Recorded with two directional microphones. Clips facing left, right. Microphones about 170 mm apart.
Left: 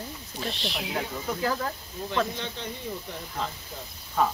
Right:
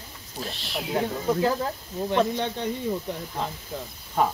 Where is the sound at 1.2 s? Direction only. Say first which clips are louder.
Right 4 dB; 25° right (ahead or behind).